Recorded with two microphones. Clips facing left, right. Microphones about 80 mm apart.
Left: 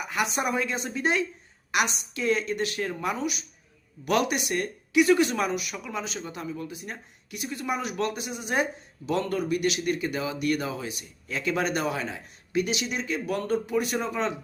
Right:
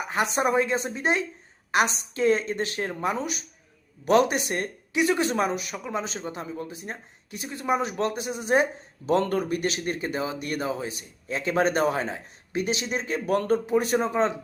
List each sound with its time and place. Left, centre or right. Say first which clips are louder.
0.1 s a man's voice: right 4 dB; right
9.0 s a man's voice: right 3 dB; right